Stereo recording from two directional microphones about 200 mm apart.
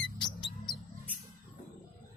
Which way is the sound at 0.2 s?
20° left (ahead or behind).